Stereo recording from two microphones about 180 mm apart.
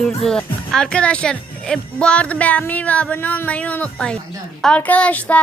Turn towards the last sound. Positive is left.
turn(degrees=10)  # may be behind; listen again after turning